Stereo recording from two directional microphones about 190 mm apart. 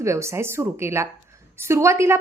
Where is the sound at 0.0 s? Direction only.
15° right (ahead or behind).